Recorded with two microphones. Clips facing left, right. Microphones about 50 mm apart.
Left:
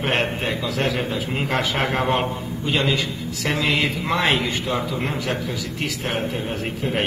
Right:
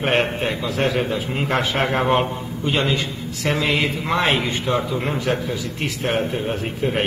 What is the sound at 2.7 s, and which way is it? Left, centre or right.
Speech, right.